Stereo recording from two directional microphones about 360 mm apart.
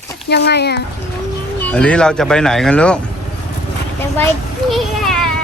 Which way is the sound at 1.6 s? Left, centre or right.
Centre.